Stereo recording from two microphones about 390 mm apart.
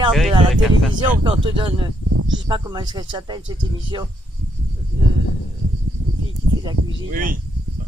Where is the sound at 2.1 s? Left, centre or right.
Right.